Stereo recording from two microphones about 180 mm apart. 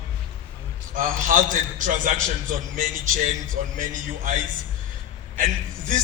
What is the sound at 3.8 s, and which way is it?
Speech, 45° right (ahead or behind).